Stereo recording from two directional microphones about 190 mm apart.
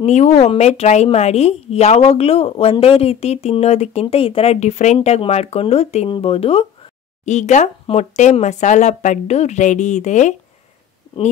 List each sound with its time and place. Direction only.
0.0 s a woman's voice: 35° left (ahead or behind)